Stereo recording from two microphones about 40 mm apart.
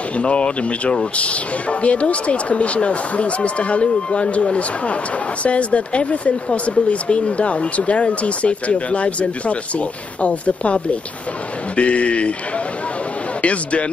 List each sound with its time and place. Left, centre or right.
0.2 s speech: left
13.4 s speech: left